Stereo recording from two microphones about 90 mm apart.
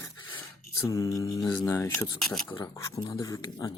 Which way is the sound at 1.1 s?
40° left (ahead or behind).